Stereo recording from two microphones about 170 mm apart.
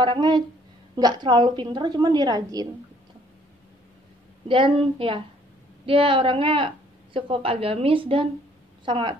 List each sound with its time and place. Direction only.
0.0 s a woman's voice: 25° right (ahead or behind)
4.5 s a woman's voice: 30° right (ahead or behind)